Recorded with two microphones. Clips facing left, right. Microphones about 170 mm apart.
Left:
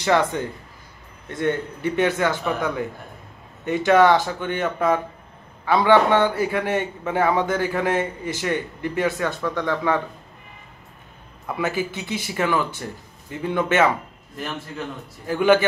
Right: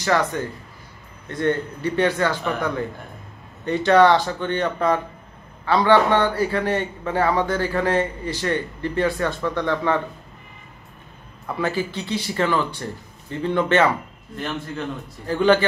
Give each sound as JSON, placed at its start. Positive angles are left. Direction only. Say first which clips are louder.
{"t": 0.0, "sound": "a man's voice", "louder": "left 1 dB", "side_deg": 20}
{"t": 11.4, "sound": "a man's voice", "louder": "even", "side_deg": 10}